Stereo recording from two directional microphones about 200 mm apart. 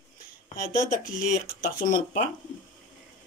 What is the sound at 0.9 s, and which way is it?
Speech, 40° left (ahead or behind).